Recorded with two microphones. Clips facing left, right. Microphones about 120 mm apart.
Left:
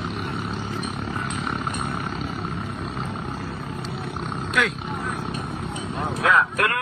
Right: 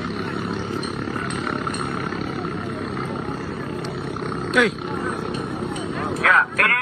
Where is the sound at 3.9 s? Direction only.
Centre (ahead or behind).